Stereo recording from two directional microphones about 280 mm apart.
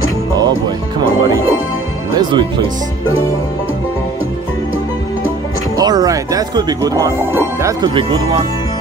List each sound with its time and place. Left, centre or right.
2.1 s speech: centre
5.8 s speech: centre